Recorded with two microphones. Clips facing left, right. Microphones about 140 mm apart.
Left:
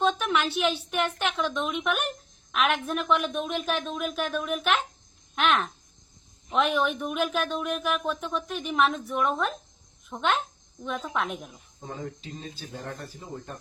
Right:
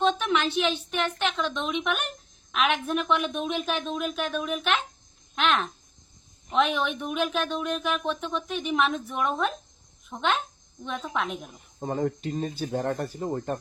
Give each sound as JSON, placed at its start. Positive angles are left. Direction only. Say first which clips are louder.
{"t": 0.0, "sound": "a woman's voice", "louder": "right 1 dB", "side_deg": 5}
{"t": 11.8, "sound": "speech", "louder": "right 9 dB", "side_deg": -60}